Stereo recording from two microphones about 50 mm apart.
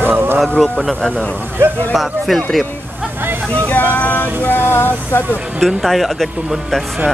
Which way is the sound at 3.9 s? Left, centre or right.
Left.